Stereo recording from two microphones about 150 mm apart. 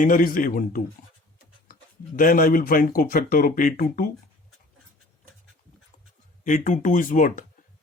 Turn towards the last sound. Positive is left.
turn(degrees=60)  # may be behind; listen again after turning